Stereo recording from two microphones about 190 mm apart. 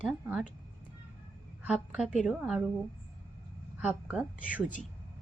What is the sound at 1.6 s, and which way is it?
A woman's voice, 5° right (ahead or behind).